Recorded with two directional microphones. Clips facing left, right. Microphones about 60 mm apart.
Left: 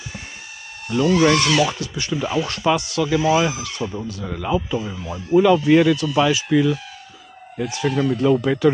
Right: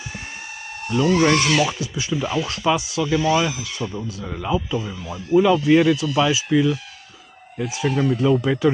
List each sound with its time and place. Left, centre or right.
1.3 s speech: centre
1.7 s speech: centre
3.0 s speech: centre
4.5 s speech: centre